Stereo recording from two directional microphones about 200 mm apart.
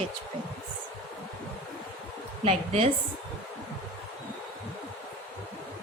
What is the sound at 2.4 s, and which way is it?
Speech, 30° right (ahead or behind).